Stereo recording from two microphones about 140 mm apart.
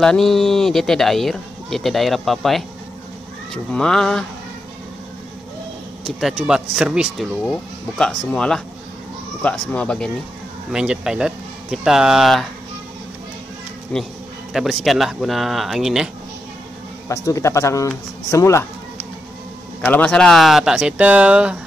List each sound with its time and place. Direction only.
0.0 s speech: 5° left (ahead or behind)
6.0 s speech: centre (ahead or behind)
8.0 s speech: 5° left (ahead or behind)
10.7 s speech: 5° right (ahead or behind)
13.9 s speech: 5° left (ahead or behind)
17.1 s a man's voice: 20° left (ahead or behind)
19.8 s speech: 10° left (ahead or behind); by 21.5 s 10° right (ahead or behind)